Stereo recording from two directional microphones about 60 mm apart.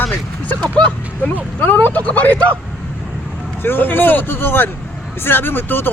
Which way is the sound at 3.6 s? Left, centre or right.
Left.